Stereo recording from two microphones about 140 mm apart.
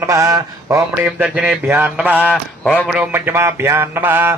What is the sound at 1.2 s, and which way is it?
Mantra, 10° right (ahead or behind).